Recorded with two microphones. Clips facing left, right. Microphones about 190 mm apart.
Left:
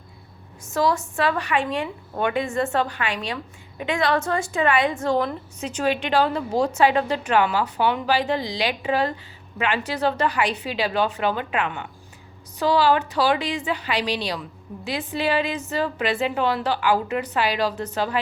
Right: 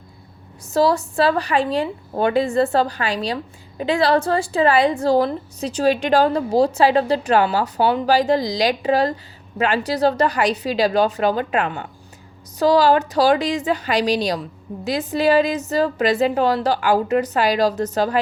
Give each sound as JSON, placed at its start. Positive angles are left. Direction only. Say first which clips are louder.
{"t": 0.7, "sound": "a woman's voice", "louder": "right 5 dB", "side_deg": -35}